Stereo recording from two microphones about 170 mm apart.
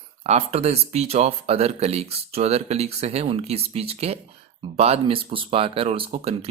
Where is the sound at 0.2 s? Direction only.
40° right (ahead or behind).